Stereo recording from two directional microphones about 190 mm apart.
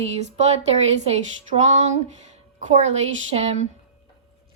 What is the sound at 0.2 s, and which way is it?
A woman's voice, 35° right (ahead or behind).